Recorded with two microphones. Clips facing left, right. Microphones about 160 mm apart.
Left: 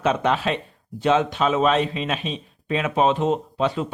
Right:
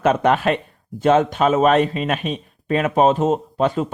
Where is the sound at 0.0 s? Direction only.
50° right (ahead or behind).